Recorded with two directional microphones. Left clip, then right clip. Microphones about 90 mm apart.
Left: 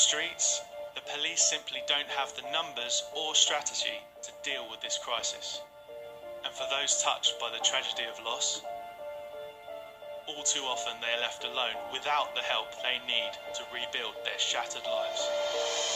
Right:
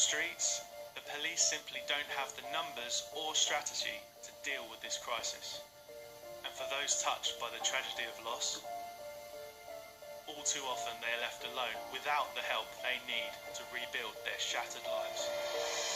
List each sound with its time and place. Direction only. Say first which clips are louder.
0.0 s music: left 6 dB; 20° left (ahead or behind)
1.1 s speech: left 6 dB; 20° left (ahead or behind)
10.2 s speech: left 6 dB; 20° left (ahead or behind)